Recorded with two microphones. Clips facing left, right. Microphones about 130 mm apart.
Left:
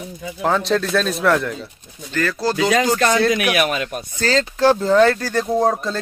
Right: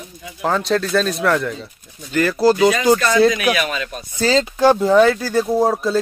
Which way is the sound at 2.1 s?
10° right (ahead or behind).